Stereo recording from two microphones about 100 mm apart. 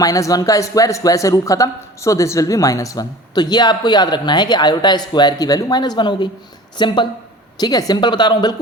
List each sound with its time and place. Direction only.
0.0 s a woman's voice: 35° left (ahead or behind); by 7.1 s 50° left (ahead or behind)
7.6 s a woman's voice: 40° left (ahead or behind)